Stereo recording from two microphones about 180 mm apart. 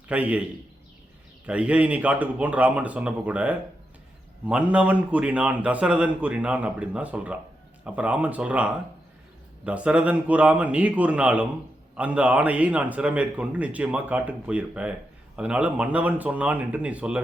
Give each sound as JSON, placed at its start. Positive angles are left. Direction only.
{"t": 0.1, "sound": "a man's voice", "side_deg": -10}
{"t": 1.5, "sound": "a man's voice", "side_deg": -5}